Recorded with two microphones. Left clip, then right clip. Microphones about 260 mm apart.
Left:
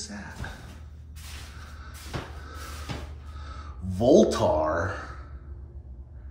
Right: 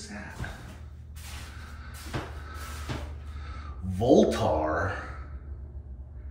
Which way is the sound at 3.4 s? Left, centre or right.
Centre.